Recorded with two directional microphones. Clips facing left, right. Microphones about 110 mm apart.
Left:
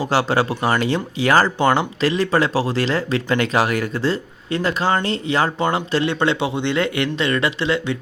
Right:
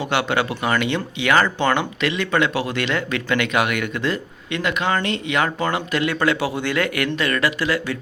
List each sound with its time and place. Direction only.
0.0 s speech: 35° left (ahead or behind)